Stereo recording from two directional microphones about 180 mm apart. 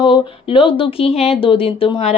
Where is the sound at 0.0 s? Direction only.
30° left (ahead or behind).